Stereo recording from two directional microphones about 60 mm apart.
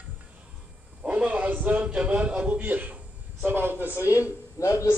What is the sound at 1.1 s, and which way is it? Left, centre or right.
A man's voice, right.